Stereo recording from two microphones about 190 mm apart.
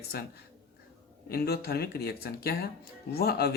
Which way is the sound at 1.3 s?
55° left (ahead or behind).